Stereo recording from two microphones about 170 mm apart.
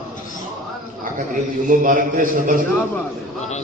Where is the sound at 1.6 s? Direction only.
55° right (ahead or behind).